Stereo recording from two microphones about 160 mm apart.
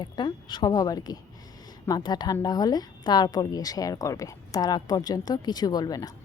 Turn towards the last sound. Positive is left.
turn(degrees=25)  # may be behind; listen again after turning